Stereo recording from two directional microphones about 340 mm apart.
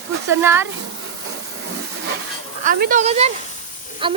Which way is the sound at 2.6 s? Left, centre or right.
Right.